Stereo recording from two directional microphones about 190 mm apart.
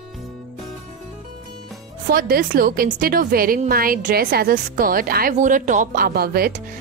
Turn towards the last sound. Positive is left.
turn(degrees=-55)  # may be behind; listen again after turning